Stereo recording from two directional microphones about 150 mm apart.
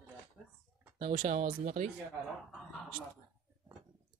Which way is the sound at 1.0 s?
45° right (ahead or behind).